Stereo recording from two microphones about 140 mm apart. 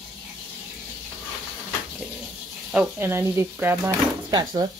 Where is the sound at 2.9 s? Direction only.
15° right (ahead or behind).